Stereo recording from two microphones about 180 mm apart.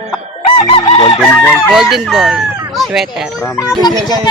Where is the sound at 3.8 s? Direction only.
20° left (ahead or behind).